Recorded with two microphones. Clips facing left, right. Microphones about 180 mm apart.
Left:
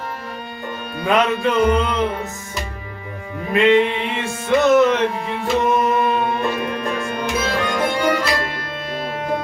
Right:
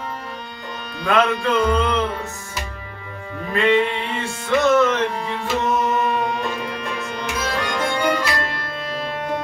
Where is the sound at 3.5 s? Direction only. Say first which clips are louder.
Left 3 dB; 15° left (ahead or behind).